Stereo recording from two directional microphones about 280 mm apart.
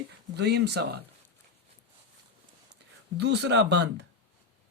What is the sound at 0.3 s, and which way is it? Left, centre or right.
Speech, right.